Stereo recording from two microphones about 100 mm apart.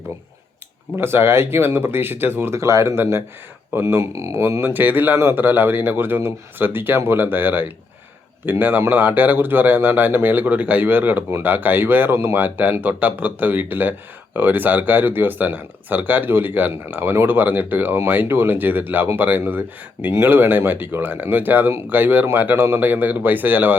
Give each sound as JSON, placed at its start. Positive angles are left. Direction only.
{"t": 0.9, "sound": "speech", "side_deg": -25}